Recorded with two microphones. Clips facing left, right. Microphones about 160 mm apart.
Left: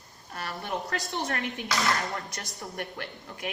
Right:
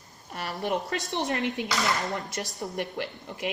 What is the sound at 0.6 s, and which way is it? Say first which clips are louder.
A woman's voice: right 5 dB; 20° right (ahead or behind).